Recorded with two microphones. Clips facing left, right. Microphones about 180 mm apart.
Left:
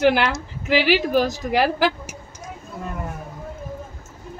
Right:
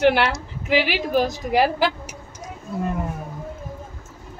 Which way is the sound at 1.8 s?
50° left (ahead or behind).